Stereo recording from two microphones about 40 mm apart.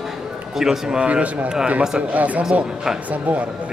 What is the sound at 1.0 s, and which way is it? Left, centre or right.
Speech, right.